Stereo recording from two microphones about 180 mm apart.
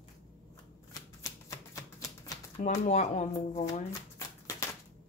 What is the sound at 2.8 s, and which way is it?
Speech, 40° left (ahead or behind).